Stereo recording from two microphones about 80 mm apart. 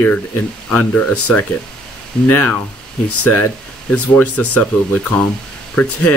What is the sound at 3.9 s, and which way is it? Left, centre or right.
Speech, centre.